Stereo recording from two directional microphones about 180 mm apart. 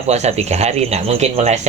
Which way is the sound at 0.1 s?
35° right (ahead or behind).